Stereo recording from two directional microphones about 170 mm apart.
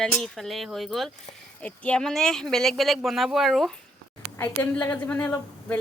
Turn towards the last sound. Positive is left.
turn(degrees=10)  # may be behind; listen again after turning